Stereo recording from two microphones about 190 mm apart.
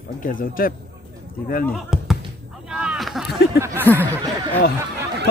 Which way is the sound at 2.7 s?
5° right (ahead or behind).